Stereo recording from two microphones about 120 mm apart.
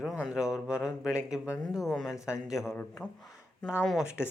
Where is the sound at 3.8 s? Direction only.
Centre (ahead or behind).